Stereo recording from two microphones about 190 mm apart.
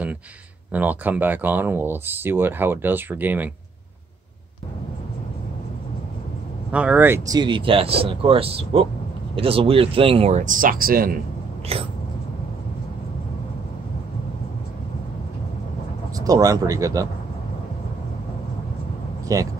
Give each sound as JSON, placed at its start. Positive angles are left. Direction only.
{"t": 0.7, "sound": "speech", "side_deg": -10}
{"t": 6.7, "sound": "speech", "side_deg": -5}
{"t": 11.7, "sound": "speech", "side_deg": -30}
{"t": 16.2, "sound": "speech", "side_deg": -20}
{"t": 19.2, "sound": "vehicle", "side_deg": -20}